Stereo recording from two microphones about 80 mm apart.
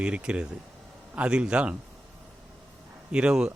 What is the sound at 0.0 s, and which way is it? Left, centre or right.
Speech, centre.